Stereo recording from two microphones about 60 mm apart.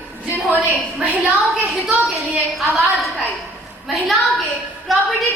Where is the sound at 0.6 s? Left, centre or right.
Right.